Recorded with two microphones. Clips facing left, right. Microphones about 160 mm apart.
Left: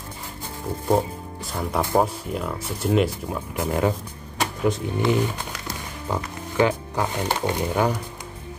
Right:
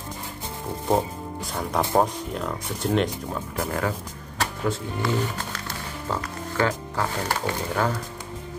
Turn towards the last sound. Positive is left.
turn(degrees=15)  # may be behind; listen again after turning